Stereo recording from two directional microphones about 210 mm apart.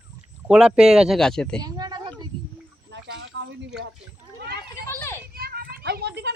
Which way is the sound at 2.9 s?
55° right (ahead or behind).